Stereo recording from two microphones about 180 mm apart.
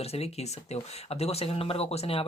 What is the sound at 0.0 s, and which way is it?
Speech, 35° left (ahead or behind).